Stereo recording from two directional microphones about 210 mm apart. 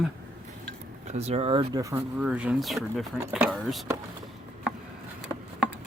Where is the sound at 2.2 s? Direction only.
5° right (ahead or behind).